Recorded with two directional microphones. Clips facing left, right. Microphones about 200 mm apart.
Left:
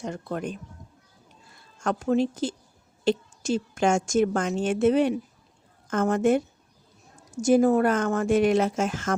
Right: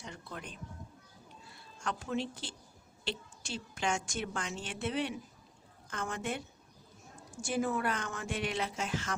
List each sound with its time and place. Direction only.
0.0 s a woman's voice: 45° left (ahead or behind)
1.8 s a woman's voice: 45° left (ahead or behind)